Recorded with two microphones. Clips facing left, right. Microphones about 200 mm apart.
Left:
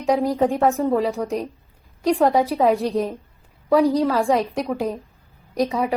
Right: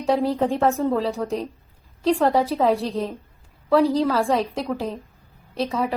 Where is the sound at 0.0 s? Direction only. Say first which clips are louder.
Left 2 dB; 15° left (ahead or behind).